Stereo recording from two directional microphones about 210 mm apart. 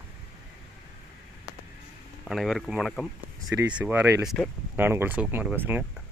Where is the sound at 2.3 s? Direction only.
Centre (ahead or behind).